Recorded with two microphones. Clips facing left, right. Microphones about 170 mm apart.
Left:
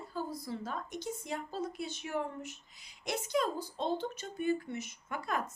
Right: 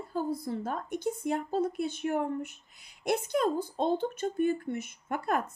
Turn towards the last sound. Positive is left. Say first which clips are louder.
# right 6 dB
turn(degrees=-55)  # may be behind; listen again after turning